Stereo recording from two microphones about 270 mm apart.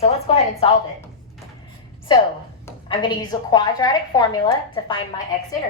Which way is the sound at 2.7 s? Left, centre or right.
Centre.